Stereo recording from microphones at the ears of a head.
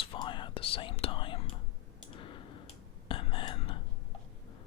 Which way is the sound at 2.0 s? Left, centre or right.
Left.